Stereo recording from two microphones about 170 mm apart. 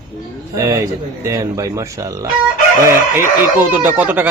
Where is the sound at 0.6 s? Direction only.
20° right (ahead or behind).